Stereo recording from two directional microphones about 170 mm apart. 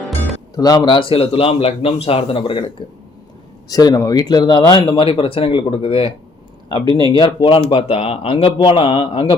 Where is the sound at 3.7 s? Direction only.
20° left (ahead or behind).